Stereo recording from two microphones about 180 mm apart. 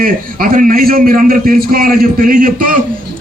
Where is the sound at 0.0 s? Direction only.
50° right (ahead or behind).